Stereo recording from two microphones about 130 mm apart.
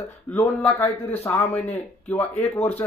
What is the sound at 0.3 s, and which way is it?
Speech, 15° left (ahead or behind).